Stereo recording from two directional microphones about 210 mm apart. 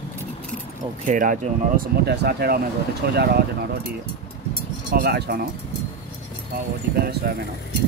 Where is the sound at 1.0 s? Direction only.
40° right (ahead or behind).